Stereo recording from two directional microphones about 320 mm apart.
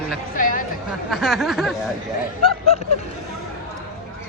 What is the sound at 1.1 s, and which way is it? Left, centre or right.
Speech, centre.